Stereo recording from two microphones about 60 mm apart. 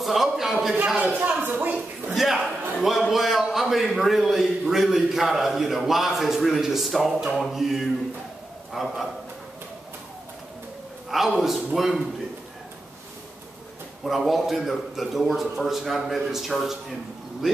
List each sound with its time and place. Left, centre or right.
0.0 s a sound: centre
0.9 s a man's voice: right
2.1 s a sound: centre
3.0 s a man's voice: centre
11.1 s a man's voice: centre
14.0 s a man's voice: centre